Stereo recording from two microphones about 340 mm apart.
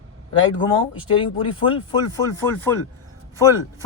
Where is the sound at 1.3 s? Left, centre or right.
Centre.